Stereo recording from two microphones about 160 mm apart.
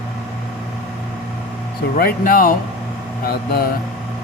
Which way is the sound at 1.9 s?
60° left (ahead or behind).